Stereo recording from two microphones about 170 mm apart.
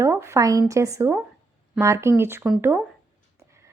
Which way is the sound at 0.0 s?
15° right (ahead or behind).